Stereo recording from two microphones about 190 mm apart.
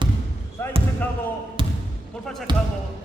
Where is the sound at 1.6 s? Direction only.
25° right (ahead or behind).